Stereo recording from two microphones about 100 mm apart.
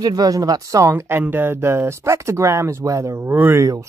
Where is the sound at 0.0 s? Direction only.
40° right (ahead or behind).